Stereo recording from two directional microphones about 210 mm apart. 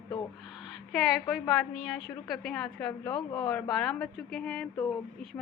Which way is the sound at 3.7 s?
Centre (ahead or behind).